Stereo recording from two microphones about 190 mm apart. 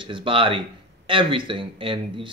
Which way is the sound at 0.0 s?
25° right (ahead or behind).